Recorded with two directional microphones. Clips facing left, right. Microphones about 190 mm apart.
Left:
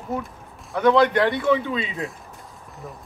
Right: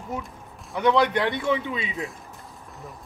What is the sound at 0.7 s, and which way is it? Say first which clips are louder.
Speech: left 4 dB; 15° right (ahead or behind).